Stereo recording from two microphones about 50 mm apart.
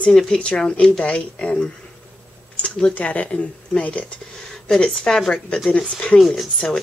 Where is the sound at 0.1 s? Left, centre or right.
Centre.